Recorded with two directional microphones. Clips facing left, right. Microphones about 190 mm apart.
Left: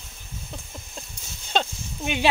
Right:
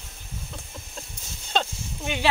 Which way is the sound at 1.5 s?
15° left (ahead or behind).